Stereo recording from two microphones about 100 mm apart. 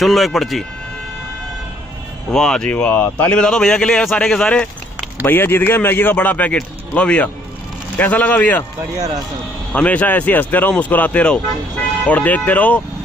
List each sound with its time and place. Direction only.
0.0 s speech: centre (ahead or behind)
2.3 s speech: 5° left (ahead or behind)
5.2 s speech: 20° left (ahead or behind)
9.7 s speech: 15° left (ahead or behind)